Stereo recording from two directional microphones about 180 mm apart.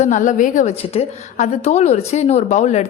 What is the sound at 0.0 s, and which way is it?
A woman's voice, 45° left (ahead or behind).